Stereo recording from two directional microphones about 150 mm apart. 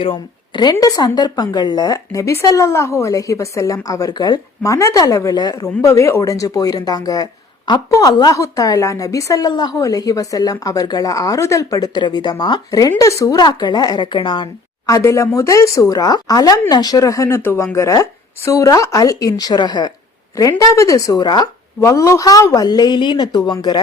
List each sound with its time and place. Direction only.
0.0 s speech: 35° left (ahead or behind)